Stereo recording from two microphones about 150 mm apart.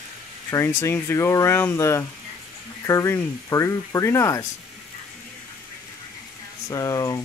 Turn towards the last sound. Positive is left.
turn(degrees=20)  # may be behind; listen again after turning